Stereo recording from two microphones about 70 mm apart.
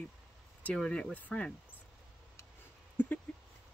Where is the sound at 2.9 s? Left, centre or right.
Left.